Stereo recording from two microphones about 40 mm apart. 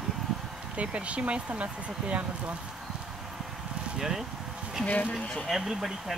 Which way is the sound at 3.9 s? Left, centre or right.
Centre.